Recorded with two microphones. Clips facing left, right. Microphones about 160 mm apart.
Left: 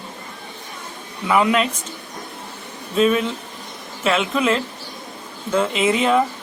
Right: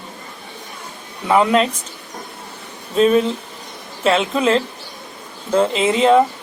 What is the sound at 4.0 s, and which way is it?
Speech, 35° right (ahead or behind).